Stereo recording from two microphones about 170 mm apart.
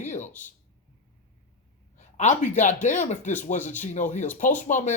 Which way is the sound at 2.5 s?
45° left (ahead or behind).